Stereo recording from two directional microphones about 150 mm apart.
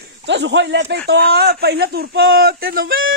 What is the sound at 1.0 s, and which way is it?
Speech, 90° right.